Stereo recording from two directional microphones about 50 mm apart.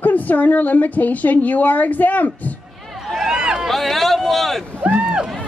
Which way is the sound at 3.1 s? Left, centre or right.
Centre.